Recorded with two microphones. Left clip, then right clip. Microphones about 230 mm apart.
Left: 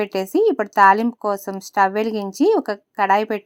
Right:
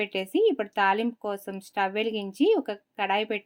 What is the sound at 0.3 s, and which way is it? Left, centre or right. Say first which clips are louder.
Speech: left 5 dB; left.